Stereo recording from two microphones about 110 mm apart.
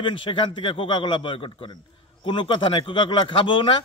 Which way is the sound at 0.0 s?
50° left (ahead or behind).